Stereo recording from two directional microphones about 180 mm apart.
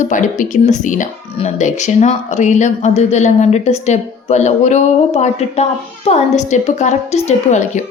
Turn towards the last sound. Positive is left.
turn(degrees=40)  # may be behind; listen again after turning